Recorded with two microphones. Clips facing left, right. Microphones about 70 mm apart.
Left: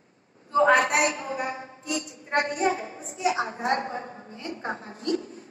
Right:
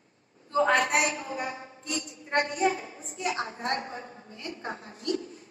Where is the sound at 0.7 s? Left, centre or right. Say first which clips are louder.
Left 3 dB; left.